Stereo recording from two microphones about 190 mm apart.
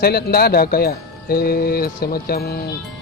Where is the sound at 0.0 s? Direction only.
55° left (ahead or behind).